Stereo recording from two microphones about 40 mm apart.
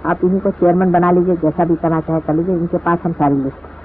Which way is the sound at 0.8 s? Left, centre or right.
Left.